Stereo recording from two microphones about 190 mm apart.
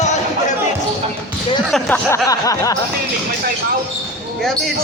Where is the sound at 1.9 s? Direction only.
15° left (ahead or behind).